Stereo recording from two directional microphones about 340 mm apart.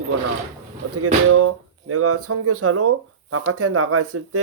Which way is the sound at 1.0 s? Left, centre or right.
Right.